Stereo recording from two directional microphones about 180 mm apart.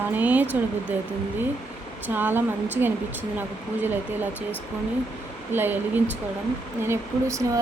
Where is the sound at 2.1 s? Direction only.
10° right (ahead or behind).